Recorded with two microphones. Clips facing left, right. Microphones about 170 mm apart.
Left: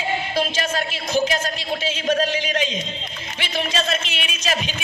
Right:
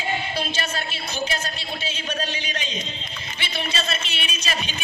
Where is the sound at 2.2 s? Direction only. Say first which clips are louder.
Left 8 dB; 90° left.